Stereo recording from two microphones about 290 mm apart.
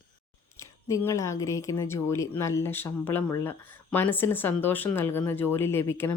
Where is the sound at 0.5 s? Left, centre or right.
Centre.